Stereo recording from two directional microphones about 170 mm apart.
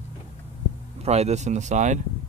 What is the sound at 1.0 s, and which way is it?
Speech, 40° right (ahead or behind).